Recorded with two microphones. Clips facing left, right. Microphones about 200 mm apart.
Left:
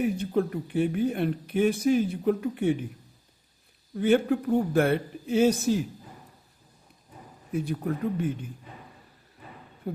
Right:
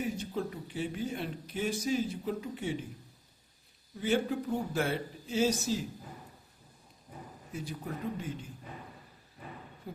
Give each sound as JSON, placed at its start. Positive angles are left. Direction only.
{"t": 0.0, "sound": "speech", "side_deg": 60}
{"t": 3.9, "sound": "speech", "side_deg": 60}
{"t": 7.5, "sound": "speech", "side_deg": 55}
{"t": 9.9, "sound": "speech", "side_deg": 60}